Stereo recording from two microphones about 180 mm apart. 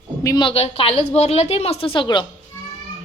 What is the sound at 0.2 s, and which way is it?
A woman's voice, 20° left (ahead or behind).